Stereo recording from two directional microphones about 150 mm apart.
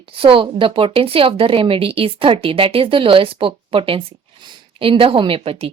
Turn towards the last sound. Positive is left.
turn(degrees=-40)  # may be behind; listen again after turning